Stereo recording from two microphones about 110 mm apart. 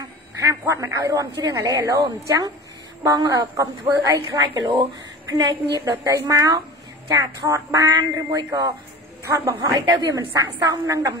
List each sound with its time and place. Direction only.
0.4 s speech: 30° right (ahead or behind)
4.6 s speech: 45° right (ahead or behind)
5.9 s a woman's voice: 30° right (ahead or behind)